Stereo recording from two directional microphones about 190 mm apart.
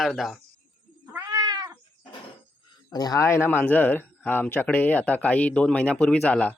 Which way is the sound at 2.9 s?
20° left (ahead or behind).